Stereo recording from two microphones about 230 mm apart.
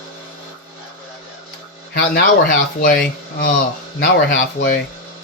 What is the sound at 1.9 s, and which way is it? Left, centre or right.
Speech, left.